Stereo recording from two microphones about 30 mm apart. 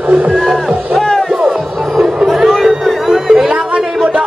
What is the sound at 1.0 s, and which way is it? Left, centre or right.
Music, centre.